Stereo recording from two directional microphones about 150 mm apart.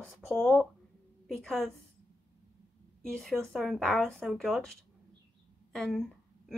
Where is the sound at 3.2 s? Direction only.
Centre (ahead or behind).